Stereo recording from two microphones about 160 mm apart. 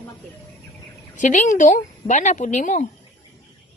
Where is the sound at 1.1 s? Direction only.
50° left (ahead or behind).